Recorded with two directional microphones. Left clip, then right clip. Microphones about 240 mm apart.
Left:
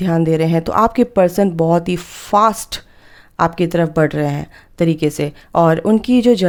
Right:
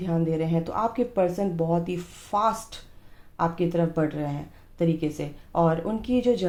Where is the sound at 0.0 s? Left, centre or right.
Left.